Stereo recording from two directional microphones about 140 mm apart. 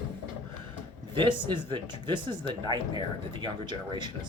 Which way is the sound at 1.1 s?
35° right (ahead or behind).